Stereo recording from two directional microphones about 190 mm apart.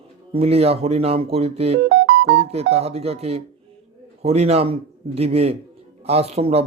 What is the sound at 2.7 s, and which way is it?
Speech, 30° right (ahead or behind).